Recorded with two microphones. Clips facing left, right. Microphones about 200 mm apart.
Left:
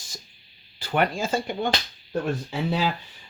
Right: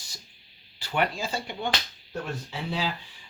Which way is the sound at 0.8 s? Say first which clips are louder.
Left 4 dB; 50° left (ahead or behind).